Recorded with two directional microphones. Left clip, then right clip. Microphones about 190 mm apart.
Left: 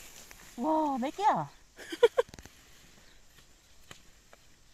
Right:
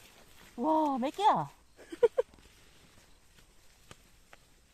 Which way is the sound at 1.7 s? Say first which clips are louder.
Left 3 dB; 5° left (ahead or behind).